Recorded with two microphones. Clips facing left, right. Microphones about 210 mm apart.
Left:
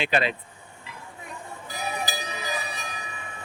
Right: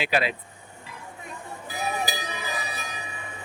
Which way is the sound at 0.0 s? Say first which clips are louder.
Even; 5° right (ahead or behind).